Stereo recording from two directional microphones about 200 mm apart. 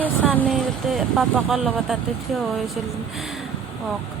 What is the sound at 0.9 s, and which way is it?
Speech, centre (ahead or behind).